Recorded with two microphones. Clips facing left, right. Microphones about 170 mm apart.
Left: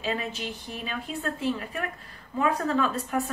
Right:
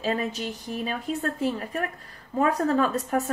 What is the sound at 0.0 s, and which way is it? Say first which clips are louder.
A woman's voice: right 4 dB; 40° right (ahead or behind).